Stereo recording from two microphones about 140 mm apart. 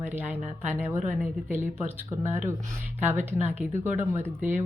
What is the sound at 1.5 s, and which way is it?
Speech, 15° right (ahead or behind).